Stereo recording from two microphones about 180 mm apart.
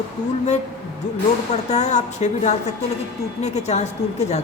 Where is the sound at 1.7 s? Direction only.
40° left (ahead or behind).